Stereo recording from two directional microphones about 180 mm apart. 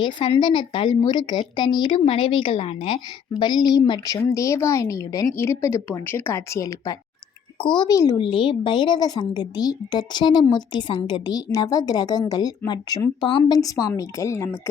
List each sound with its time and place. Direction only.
0.0 s a woman's voice: 25° left (ahead or behind)